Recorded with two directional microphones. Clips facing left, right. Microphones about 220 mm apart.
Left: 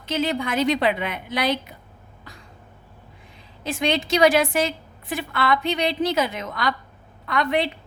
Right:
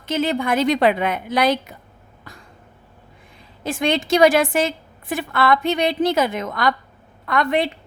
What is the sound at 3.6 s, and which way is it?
A woman's voice, 50° right (ahead or behind).